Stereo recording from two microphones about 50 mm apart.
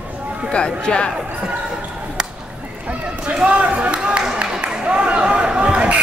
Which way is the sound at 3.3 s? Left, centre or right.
Right.